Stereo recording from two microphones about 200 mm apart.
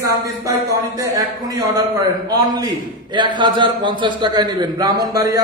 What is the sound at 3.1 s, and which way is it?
A man's voice, 20° right (ahead or behind).